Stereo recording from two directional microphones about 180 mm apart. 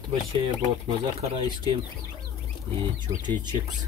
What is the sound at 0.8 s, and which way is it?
Speech, 25° right (ahead or behind).